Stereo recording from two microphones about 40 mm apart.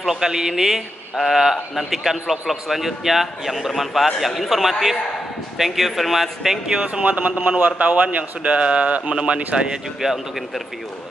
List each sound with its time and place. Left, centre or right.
0.0 s a man's voice: centre
6.8 s speech: right; by 10.2 s centre